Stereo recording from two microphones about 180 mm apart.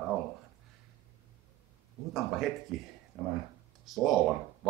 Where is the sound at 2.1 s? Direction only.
Centre (ahead or behind).